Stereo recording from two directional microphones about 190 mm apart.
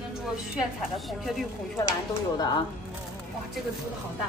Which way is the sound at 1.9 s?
20° left (ahead or behind).